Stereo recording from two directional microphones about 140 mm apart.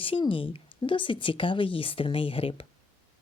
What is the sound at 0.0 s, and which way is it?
Speech, 40° left (ahead or behind).